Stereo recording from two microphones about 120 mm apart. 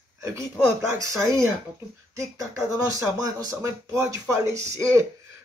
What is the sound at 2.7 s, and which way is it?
Speech, 25° right (ahead or behind).